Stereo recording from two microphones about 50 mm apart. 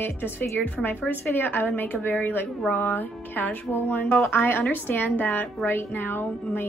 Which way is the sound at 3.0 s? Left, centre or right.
Left.